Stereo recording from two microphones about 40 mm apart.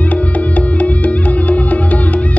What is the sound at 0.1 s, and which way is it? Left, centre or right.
Music, left.